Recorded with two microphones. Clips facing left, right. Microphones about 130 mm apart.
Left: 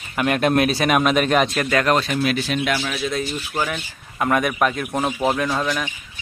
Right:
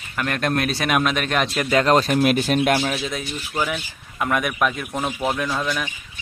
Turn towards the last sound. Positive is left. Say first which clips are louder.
# left 3 dB
turn(degrees=5)  # may be behind; listen again after turning